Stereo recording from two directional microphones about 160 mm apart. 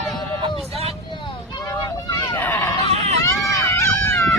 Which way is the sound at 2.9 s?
40° right (ahead or behind).